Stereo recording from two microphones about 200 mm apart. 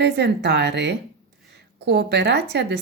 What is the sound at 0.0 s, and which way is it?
A woman's voice, 55° right (ahead or behind).